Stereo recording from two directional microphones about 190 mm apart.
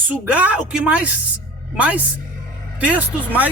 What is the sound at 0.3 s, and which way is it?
Speech, 5° right (ahead or behind).